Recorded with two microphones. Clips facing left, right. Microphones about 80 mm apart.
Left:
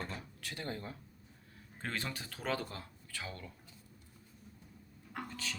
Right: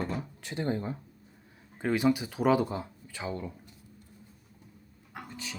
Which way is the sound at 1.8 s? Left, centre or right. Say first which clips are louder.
Right 14 dB; centre.